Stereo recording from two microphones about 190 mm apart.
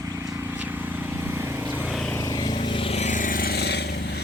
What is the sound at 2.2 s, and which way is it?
Vehicle, 20° left (ahead or behind).